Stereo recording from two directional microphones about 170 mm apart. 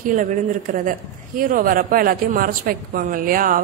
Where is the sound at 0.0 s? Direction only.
50° right (ahead or behind).